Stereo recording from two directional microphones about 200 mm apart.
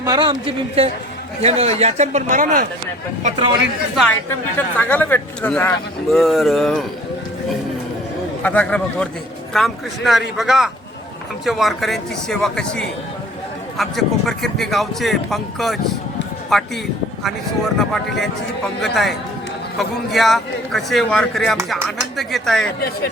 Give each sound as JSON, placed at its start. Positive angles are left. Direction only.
{"t": 0.0, "sound": "a man's voice", "side_deg": -20}
{"t": 3.2, "sound": "a man's voice", "side_deg": -30}
{"t": 3.9, "sound": "speech", "side_deg": 5}
{"t": 8.4, "sound": "speech", "side_deg": 5}